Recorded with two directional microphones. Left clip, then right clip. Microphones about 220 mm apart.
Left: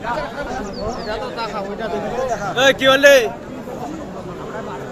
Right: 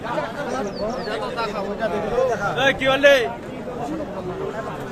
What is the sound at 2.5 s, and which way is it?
Speech, 45° left (ahead or behind).